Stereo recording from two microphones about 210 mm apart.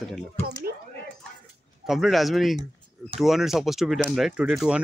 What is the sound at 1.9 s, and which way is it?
Speech, centre (ahead or behind).